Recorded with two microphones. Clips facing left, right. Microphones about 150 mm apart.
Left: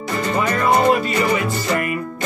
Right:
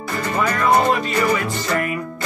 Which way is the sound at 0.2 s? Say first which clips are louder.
Left 1 dB; 20° left (ahead or behind).